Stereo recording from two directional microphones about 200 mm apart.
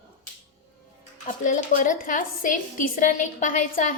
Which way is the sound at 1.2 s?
40° left (ahead or behind).